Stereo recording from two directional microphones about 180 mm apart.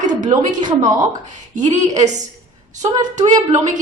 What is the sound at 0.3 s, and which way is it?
Speech, 25° right (ahead or behind).